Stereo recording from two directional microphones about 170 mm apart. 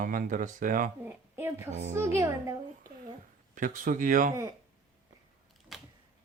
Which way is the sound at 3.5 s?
50° right (ahead or behind).